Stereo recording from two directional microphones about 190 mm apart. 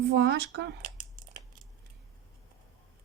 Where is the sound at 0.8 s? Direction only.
40° right (ahead or behind).